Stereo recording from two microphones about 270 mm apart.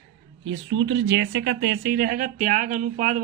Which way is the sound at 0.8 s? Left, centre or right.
Right.